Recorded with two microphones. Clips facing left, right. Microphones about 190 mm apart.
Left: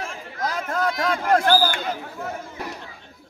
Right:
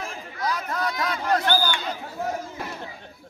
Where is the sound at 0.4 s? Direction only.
50° left (ahead or behind).